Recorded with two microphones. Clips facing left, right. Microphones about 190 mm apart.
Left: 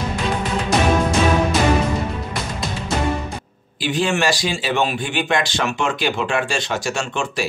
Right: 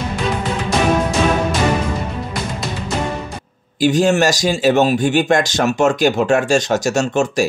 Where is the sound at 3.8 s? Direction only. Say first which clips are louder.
Right 6 dB; 45° right (ahead or behind).